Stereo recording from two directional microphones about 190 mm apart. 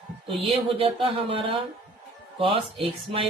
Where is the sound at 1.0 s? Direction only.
30° right (ahead or behind).